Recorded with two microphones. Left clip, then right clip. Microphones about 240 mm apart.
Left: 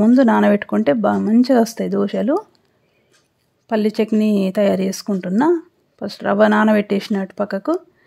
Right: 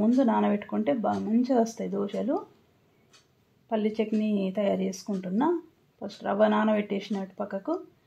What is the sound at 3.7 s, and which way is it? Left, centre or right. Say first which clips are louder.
Speech: left 10 dB; left.